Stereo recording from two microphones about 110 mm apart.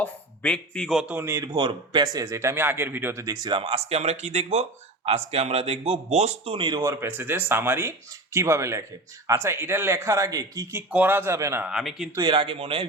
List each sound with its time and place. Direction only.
0.0 s a man's voice: 10° left (ahead or behind)
0.9 s speech: 15° right (ahead or behind)
1.5 s speech: 45° right (ahead or behind)
2.2 s speech: 25° right (ahead or behind)
3.3 s speech: 40° right (ahead or behind)
3.6 s a man's voice: 65° right (ahead or behind)
6.7 s speech: 35° right (ahead or behind)
7.1 s speech: 20° right (ahead or behind)
10.9 s speech: 15° right (ahead or behind)
11.6 s speech: 5° right (ahead or behind)
12.2 s speech: 50° right (ahead or behind)